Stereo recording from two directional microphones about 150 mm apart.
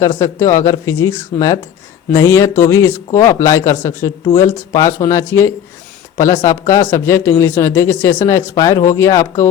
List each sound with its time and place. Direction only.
0.0 s speech: 20° left (ahead or behind)